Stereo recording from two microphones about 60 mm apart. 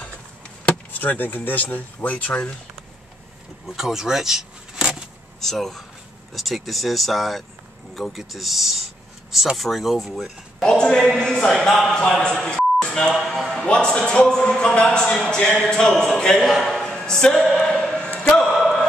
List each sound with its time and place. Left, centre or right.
0.7 s speech: left
3.6 s speech: centre
5.4 s speech: centre
10.6 s speech: centre
12.8 s a sound: centre
13.1 s speech: centre
13.7 s speech: centre
16.4 s speech: centre
17.6 s a sound: centre